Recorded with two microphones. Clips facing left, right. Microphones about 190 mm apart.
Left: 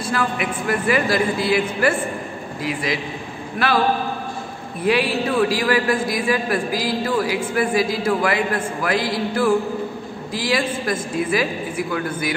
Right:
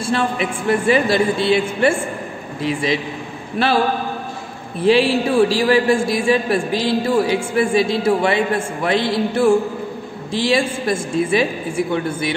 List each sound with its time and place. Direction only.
0.0 s a man's voice: 25° right (ahead or behind)